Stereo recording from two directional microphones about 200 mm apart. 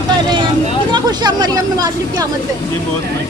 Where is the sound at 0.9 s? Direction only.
20° right (ahead or behind).